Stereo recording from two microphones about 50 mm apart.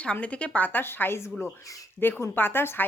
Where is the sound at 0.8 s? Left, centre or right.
Left.